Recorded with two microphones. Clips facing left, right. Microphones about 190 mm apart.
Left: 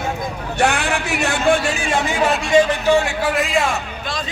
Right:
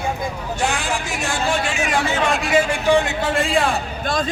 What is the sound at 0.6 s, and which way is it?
A man's voice, 65° left (ahead or behind).